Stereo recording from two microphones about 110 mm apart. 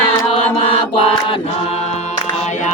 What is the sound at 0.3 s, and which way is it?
Chant, 55° left (ahead or behind).